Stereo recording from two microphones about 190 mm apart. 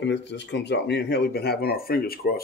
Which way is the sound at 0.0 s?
65° left (ahead or behind).